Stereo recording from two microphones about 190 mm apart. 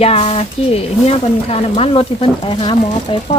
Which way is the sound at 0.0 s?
30° left (ahead or behind).